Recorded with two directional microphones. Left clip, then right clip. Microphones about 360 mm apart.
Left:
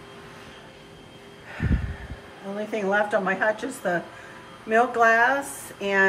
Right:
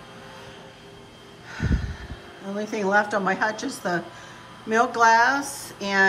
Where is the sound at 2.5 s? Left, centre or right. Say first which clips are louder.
Right 1 dB; centre.